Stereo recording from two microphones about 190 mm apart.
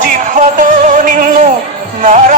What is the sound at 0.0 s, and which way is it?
Music, 40° right (ahead or behind).